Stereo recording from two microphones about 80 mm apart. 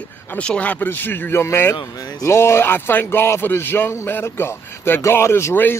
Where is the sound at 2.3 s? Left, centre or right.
Left.